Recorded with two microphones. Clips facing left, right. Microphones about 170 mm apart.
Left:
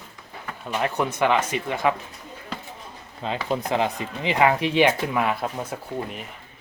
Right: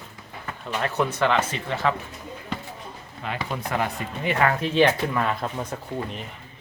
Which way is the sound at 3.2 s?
25° left (ahead or behind).